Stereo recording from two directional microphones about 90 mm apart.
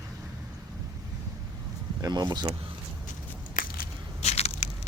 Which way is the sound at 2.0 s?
50° right (ahead or behind).